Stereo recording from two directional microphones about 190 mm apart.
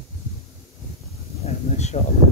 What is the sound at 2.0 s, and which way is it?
Speech, 35° left (ahead or behind).